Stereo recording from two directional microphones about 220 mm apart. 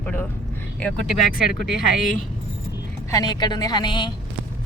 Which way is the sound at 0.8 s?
5° left (ahead or behind).